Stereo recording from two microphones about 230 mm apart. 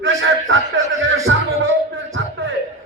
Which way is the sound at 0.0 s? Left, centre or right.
Right.